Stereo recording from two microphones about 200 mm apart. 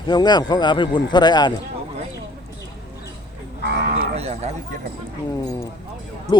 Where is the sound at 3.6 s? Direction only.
55° right (ahead or behind).